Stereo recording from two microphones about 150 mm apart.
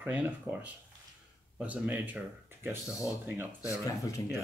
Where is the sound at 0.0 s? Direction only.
10° right (ahead or behind).